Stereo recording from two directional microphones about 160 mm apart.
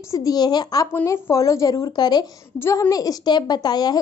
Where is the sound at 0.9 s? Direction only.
15° left (ahead or behind).